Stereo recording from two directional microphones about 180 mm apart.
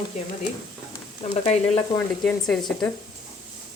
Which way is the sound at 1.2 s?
35° left (ahead or behind).